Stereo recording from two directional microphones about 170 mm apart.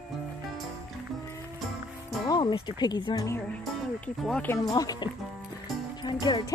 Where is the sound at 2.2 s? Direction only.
25° left (ahead or behind).